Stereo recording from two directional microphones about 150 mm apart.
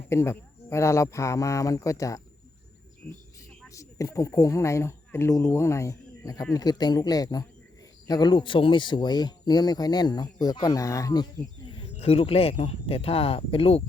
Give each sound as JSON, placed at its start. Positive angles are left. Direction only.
{"t": 0.1, "sound": "speech", "side_deg": 20}
{"t": 3.7, "sound": "speech", "side_deg": 20}